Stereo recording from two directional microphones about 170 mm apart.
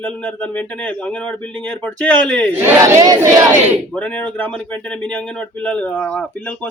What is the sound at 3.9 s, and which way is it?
Speech, 10° left (ahead or behind).